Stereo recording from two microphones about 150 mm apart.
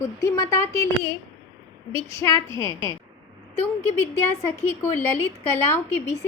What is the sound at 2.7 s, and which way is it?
Speech, 35° right (ahead or behind).